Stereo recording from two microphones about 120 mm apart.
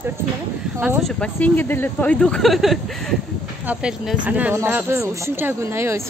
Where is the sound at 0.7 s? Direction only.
20° right (ahead or behind).